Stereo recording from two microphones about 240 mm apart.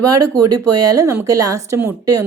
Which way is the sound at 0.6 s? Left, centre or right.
Right.